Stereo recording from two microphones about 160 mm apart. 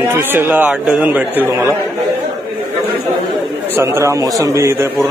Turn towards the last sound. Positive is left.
turn(degrees=-20)  # may be behind; listen again after turning